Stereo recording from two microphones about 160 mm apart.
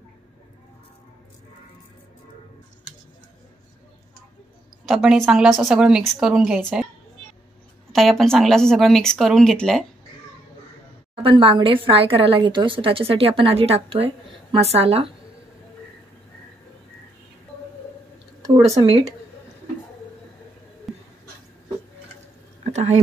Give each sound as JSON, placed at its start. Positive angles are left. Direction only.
{"t": 4.8, "sound": "a woman's voice", "side_deg": 0}
{"t": 7.9, "sound": "a woman's voice", "side_deg": 0}
{"t": 11.2, "sound": "a woman's voice", "side_deg": -35}
{"t": 18.5, "sound": "speech", "side_deg": -25}
{"t": 20.9, "sound": "a sound", "side_deg": 0}